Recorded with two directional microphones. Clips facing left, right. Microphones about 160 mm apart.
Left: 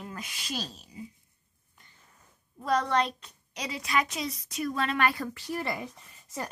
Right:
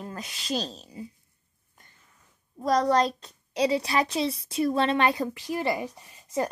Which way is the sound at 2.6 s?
35° right (ahead or behind).